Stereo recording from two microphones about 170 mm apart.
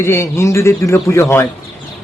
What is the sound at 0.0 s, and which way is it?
Speech, 15° left (ahead or behind).